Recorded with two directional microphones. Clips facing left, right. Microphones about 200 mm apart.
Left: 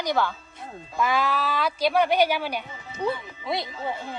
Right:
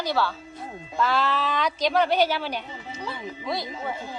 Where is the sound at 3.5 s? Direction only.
25° left (ahead or behind).